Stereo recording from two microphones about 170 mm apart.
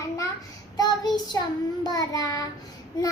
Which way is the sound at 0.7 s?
25° left (ahead or behind).